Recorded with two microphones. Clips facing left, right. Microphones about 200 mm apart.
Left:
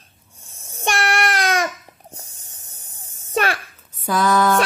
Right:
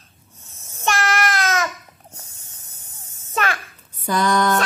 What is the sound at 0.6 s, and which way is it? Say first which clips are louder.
Babbling: even; 35° left (ahead or behind).